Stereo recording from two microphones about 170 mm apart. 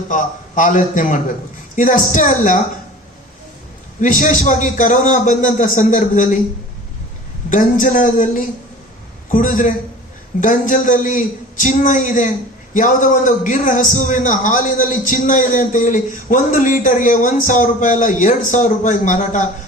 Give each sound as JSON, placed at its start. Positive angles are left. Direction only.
{"t": 0.1, "sound": "a man's voice", "side_deg": 50}
{"t": 4.0, "sound": "a man's voice", "side_deg": 50}
{"t": 7.5, "sound": "a man's voice", "side_deg": 50}